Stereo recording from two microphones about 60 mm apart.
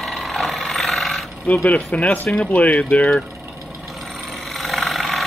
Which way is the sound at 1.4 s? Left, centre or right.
Left.